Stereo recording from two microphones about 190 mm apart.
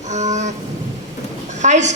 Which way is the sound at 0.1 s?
40° right (ahead or behind).